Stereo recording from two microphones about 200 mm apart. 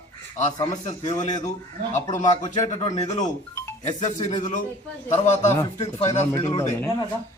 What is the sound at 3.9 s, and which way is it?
Speech, 35° left (ahead or behind).